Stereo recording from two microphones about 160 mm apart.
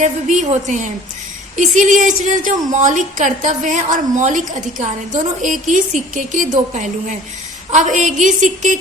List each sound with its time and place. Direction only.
0.0 s a woman's voice: 50° right (ahead or behind)